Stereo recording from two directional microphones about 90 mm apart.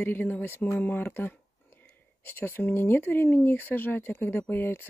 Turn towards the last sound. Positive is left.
turn(degrees=25)  # may be behind; listen again after turning